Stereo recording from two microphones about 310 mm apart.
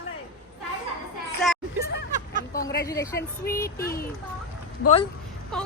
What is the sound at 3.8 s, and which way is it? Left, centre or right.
Speech, left.